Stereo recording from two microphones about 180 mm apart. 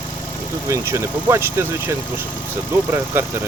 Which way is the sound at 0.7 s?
15° right (ahead or behind).